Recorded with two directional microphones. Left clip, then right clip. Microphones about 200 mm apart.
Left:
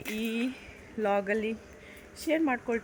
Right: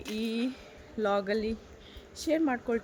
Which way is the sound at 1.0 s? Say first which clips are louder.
Left 1 dB; 5° right (ahead or behind).